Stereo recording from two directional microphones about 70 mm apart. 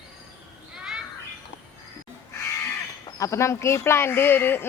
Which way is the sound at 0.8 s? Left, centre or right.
Centre.